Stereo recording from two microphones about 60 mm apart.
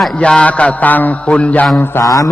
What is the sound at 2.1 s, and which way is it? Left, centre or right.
Mantra, left.